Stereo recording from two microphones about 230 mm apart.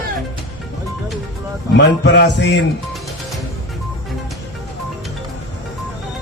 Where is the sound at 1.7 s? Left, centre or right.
Left.